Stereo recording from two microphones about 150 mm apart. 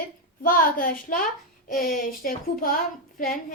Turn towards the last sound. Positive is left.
turn(degrees=65)  # may be behind; listen again after turning